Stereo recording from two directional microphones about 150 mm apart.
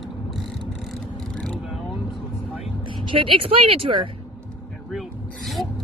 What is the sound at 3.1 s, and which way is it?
A woman's voice, 35° right (ahead or behind).